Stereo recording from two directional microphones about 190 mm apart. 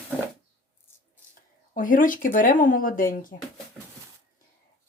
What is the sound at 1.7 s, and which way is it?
Speech, 45° left (ahead or behind).